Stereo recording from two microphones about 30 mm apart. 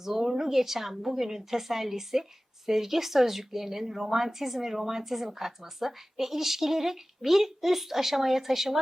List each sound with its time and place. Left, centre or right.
0.0 s speech: centre